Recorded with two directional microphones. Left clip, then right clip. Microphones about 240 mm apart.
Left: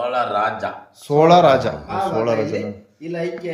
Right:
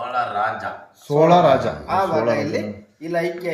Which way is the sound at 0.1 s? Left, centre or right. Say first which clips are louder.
Left 2 dB; left.